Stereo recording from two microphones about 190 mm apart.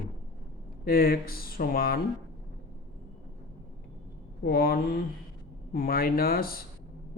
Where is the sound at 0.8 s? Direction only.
50° left (ahead or behind).